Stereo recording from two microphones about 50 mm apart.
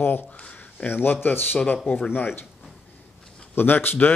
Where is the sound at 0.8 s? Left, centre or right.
Left.